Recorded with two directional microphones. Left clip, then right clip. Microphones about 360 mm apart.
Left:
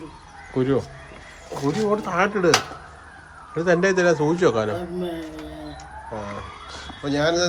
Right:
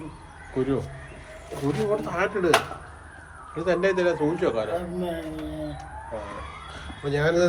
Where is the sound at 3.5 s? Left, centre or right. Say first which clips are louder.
Left 4 dB; left.